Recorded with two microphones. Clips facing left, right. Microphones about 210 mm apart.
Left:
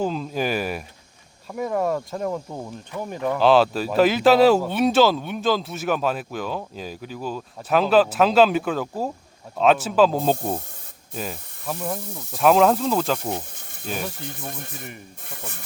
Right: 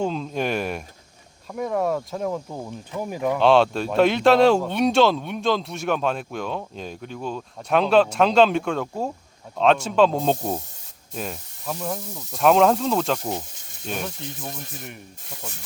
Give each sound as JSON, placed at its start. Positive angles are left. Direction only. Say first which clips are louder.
{"t": 0.0, "sound": "speech", "louder": "even", "side_deg": 5}
{"t": 13.3, "sound": "snake", "louder": "even", "side_deg": 55}
{"t": 13.8, "sound": "speech", "louder": "even", "side_deg": 5}
{"t": 14.2, "sound": "speech", "louder": "even", "side_deg": 55}